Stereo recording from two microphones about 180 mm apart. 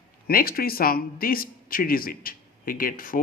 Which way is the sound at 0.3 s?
55° left (ahead or behind).